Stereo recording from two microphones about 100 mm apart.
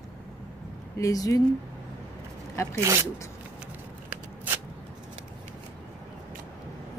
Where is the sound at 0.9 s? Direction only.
35° left (ahead or behind).